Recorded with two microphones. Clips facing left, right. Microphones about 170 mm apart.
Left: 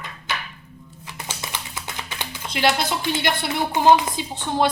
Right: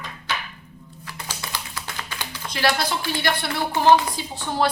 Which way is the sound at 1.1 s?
20° left (ahead or behind).